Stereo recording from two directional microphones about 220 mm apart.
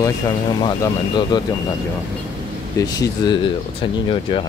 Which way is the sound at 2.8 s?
20° left (ahead or behind).